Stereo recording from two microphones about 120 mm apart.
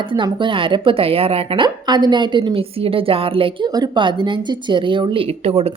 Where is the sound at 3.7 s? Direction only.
35° right (ahead or behind).